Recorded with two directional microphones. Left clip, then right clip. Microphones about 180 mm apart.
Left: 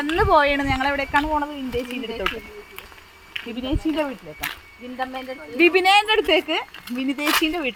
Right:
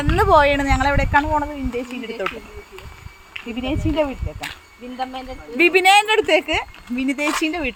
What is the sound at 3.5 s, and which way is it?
Speech, 15° right (ahead or behind).